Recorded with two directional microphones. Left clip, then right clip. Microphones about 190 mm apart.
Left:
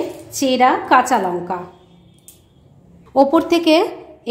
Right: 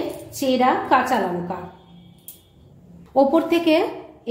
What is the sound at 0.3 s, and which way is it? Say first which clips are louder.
A woman's voice: left 5 dB; 45° left (ahead or behind).